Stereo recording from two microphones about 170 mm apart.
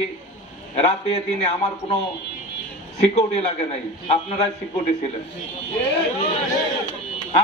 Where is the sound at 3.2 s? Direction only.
40° left (ahead or behind).